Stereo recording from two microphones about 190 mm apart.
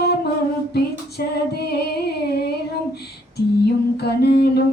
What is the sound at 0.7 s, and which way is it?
Female singing, 55° left (ahead or behind).